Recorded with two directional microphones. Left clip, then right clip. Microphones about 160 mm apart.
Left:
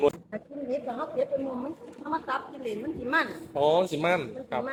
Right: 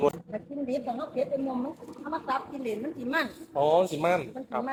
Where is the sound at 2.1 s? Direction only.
5° left (ahead or behind).